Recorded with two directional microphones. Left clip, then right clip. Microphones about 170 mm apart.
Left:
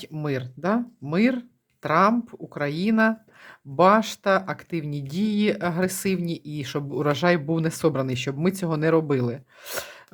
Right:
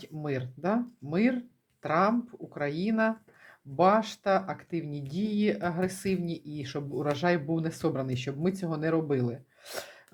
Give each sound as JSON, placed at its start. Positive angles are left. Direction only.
{"t": 0.0, "sound": "speech", "side_deg": 30}